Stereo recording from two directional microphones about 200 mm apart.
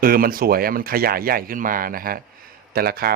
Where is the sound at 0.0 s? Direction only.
45° right (ahead or behind).